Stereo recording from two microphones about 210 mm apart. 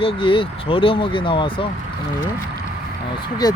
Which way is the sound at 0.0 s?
25° left (ahead or behind).